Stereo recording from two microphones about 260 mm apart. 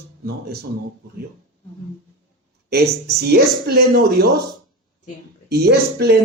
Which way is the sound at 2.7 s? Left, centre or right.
Right.